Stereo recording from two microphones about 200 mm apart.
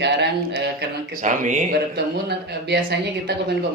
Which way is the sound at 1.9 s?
55° right (ahead or behind).